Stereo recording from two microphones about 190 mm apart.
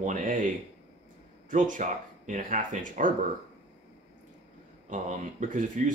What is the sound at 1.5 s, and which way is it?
Speech, 40° right (ahead or behind).